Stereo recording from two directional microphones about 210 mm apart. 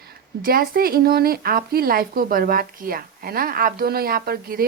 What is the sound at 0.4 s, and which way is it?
A woman's voice, 45° right (ahead or behind).